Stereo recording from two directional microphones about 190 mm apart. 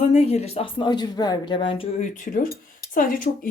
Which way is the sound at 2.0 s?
45° left (ahead or behind).